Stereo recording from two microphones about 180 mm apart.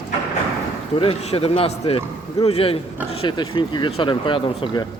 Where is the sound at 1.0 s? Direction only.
30° left (ahead or behind).